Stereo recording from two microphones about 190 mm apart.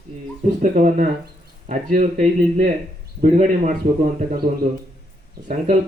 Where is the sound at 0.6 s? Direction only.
45° right (ahead or behind).